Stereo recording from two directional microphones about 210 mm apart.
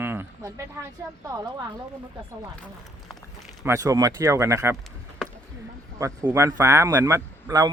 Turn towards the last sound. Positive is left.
turn(degrees=-15)  # may be behind; listen again after turning